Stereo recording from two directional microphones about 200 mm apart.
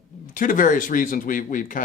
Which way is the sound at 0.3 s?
45° left (ahead or behind).